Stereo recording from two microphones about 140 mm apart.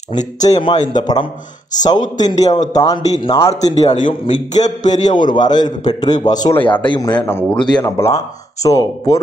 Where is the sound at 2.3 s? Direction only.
55° left (ahead or behind).